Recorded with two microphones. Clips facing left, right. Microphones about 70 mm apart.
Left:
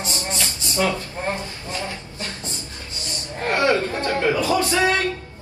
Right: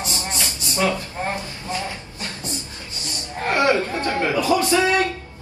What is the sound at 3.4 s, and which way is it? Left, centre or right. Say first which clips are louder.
Speech: right 1 dB; right.